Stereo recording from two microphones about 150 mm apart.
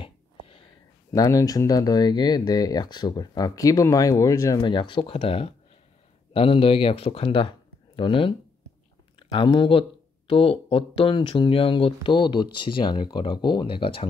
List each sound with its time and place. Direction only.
0.0 s a sound: 35° left (ahead or behind)
1.1 s speech: 25° left (ahead or behind)
9.3 s speech: 35° left (ahead or behind)